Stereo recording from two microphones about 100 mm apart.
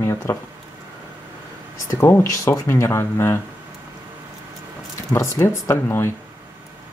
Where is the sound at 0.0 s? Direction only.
30° left (ahead or behind).